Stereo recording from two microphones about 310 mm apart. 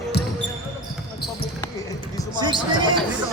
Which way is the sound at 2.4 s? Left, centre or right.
Centre.